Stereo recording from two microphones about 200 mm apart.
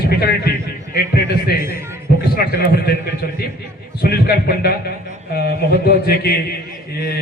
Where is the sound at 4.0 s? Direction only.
50° left (ahead or behind).